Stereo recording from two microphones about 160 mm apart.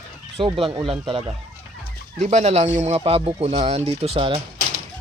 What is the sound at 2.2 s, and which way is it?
Speech, 45° right (ahead or behind).